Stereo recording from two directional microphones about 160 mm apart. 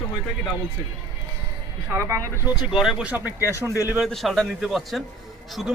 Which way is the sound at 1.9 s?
20° right (ahead or behind).